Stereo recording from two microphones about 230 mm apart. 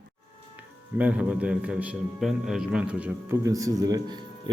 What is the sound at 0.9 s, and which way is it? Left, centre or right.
A man's voice, centre.